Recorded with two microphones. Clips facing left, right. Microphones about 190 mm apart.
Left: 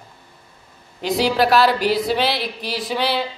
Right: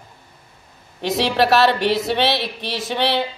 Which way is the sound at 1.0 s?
25° right (ahead or behind).